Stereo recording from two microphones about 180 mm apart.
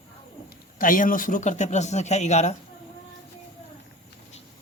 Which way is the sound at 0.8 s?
50° left (ahead or behind).